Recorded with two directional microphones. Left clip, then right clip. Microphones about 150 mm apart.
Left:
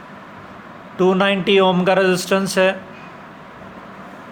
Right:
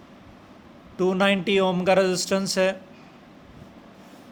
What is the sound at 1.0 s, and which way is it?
Speech, 60° right (ahead or behind).